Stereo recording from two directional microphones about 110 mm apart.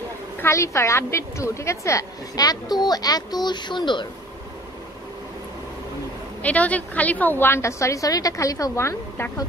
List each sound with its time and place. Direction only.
0.4 s a woman's voice: 25° left (ahead or behind); by 4.1 s 45° left (ahead or behind)
6.4 s a woman's voice: 15° left (ahead or behind)